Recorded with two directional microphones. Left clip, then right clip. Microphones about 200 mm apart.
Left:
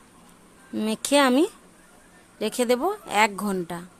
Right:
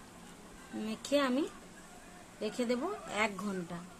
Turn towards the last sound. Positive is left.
turn(degrees=55)  # may be behind; listen again after turning